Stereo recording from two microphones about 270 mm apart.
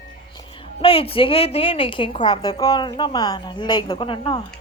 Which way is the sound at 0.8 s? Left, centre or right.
Left.